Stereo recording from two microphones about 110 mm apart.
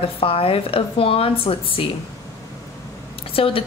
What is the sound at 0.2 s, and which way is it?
A woman's voice, 60° left (ahead or behind).